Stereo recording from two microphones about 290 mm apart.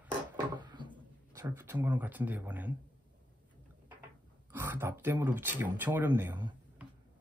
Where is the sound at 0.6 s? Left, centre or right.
Centre.